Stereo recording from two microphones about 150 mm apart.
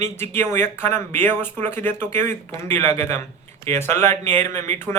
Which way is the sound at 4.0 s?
50° right (ahead or behind).